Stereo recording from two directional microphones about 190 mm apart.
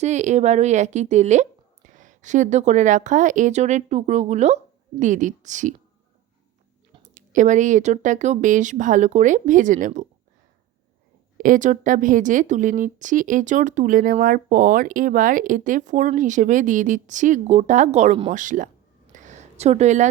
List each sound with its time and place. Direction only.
0.0 s a woman's voice: 40° right (ahead or behind)
7.0 s a woman's voice: 40° right (ahead or behind)
11.3 s a woman's voice: 45° right (ahead or behind)
19.1 s a sound: 40° right (ahead or behind)